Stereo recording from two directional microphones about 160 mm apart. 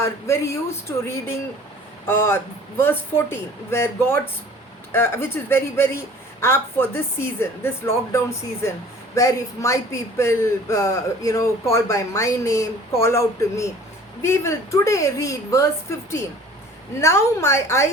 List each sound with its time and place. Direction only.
0.0 s a woman's voice: 15° left (ahead or behind)